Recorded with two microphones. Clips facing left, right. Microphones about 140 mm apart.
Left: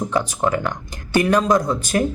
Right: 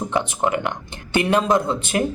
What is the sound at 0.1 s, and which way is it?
Speech, 20° right (ahead or behind).